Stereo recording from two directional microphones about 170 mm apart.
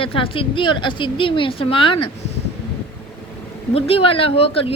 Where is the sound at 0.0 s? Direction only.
30° left (ahead or behind).